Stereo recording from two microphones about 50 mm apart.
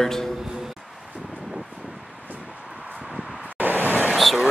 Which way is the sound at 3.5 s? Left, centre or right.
Right.